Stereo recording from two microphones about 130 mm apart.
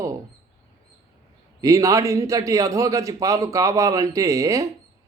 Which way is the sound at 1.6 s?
25° right (ahead or behind).